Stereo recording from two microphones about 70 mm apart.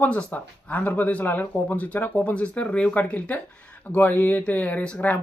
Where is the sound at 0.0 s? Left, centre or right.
Centre.